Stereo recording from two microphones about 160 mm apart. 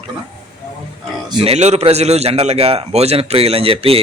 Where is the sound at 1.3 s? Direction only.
35° right (ahead or behind).